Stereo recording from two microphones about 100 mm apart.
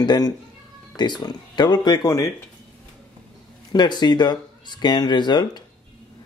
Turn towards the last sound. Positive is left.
turn(degrees=45)  # may be behind; listen again after turning